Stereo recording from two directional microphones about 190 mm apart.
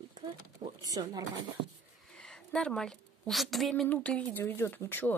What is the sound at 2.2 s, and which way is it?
A woman's voice, 5° left (ahead or behind).